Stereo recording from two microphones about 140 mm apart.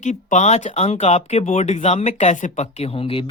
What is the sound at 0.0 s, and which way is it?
Speech, 60° left (ahead or behind).